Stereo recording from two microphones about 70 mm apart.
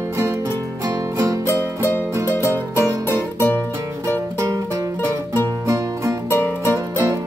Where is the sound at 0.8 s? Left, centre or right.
Right.